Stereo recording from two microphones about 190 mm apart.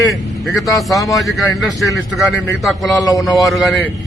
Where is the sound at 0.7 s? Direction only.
Centre (ahead or behind).